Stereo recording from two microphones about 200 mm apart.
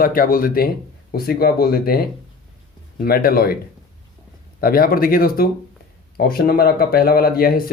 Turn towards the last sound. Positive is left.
turn(degrees=45)  # may be behind; listen again after turning